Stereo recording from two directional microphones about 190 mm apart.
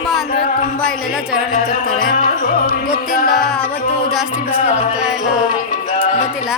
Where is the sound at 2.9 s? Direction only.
50° left (ahead or behind).